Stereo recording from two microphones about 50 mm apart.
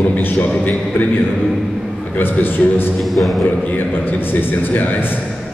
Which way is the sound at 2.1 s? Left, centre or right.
Left.